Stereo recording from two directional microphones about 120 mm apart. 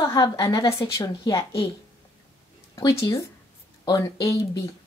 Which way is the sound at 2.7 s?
25° left (ahead or behind).